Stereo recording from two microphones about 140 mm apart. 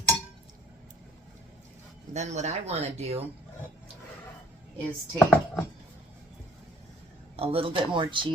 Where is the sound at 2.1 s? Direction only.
55° right (ahead or behind).